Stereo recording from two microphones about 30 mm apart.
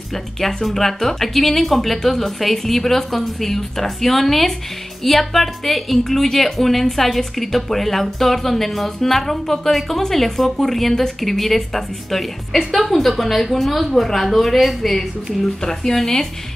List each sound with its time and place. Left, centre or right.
0.1 s a woman's voice: centre
15.6 s a woman's voice: centre